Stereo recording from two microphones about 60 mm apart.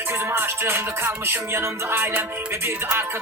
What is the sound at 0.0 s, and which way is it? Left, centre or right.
Music, right.